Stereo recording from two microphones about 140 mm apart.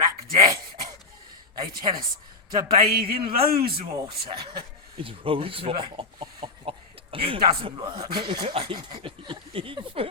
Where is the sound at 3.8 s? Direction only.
40° right (ahead or behind).